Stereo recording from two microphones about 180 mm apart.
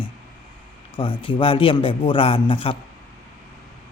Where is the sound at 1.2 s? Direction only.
30° left (ahead or behind).